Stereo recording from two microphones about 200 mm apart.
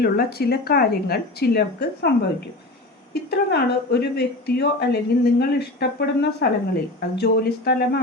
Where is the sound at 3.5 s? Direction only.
55° left (ahead or behind).